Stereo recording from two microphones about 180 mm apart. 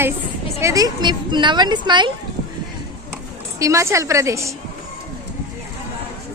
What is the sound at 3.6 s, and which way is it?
Speech, 15° right (ahead or behind).